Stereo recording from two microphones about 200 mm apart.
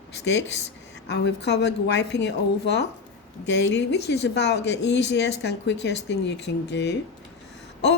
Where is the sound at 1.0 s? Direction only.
60° left (ahead or behind).